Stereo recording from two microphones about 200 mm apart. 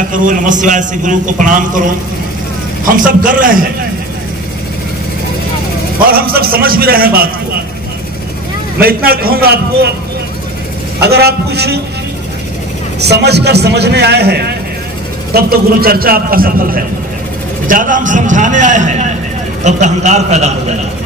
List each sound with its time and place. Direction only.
0.1 s a man's voice: 40° right (ahead or behind)
3.0 s a man's voice: 45° right (ahead or behind)
6.0 s a man's voice: 50° right (ahead or behind)
8.7 s a man's voice: 50° right (ahead or behind)
11.0 s a man's voice: 55° right (ahead or behind)
13.0 s a man's voice: 55° right (ahead or behind); by 20.7 s 35° right (ahead or behind)